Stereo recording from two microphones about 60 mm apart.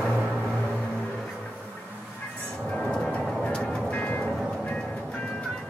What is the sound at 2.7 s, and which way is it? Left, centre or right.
Music, centre.